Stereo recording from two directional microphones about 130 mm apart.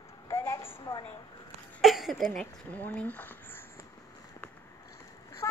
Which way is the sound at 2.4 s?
15° left (ahead or behind).